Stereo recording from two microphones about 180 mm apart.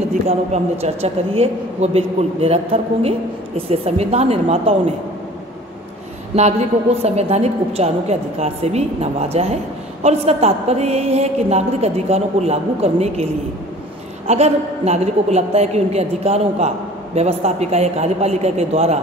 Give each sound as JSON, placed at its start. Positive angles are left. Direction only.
{"t": 0.3, "sound": "a woman's voice", "side_deg": -35}
{"t": 6.3, "sound": "a woman's voice", "side_deg": -40}